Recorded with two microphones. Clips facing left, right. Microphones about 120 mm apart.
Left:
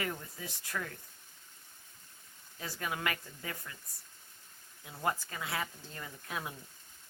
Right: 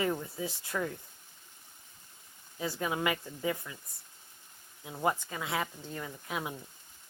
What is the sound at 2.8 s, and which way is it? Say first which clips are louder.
Speech: right 4 dB; 20° right (ahead or behind).